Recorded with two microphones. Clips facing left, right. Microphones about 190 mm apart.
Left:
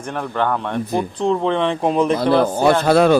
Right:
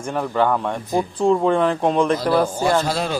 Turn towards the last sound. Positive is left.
turn(degrees=60)  # may be behind; listen again after turning